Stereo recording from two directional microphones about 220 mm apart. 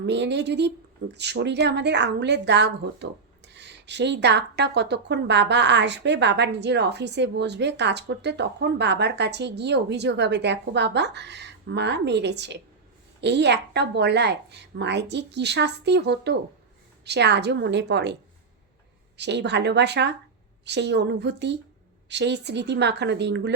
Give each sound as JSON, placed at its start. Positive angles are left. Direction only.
{"t": 0.0, "sound": "speech", "side_deg": -50}